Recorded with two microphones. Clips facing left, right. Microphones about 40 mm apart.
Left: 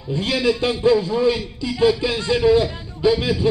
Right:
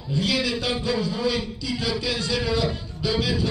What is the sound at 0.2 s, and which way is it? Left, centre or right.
A man's voice, left.